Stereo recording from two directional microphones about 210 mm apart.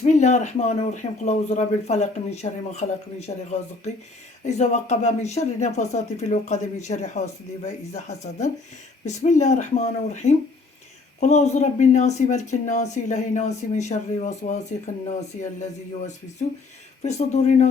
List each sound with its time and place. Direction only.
0.0 s speech: 35° left (ahead or behind)